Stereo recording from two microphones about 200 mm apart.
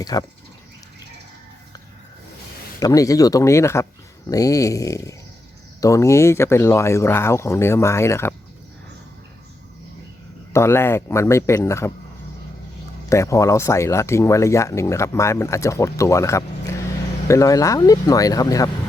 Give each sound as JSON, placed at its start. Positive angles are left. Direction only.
{"t": 0.0, "sound": "speech", "side_deg": 20}
{"t": 2.8, "sound": "speech", "side_deg": 15}
{"t": 10.5, "sound": "speech", "side_deg": 10}
{"t": 13.1, "sound": "speech", "side_deg": 15}